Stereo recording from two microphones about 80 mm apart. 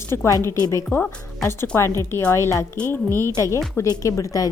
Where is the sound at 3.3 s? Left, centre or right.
Left.